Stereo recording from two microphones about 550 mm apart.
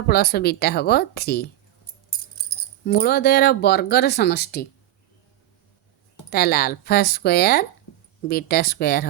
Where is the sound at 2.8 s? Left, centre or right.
Centre.